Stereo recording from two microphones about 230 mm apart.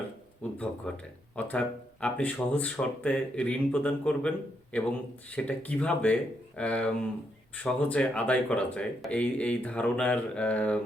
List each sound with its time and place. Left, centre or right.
0.5 s speech: centre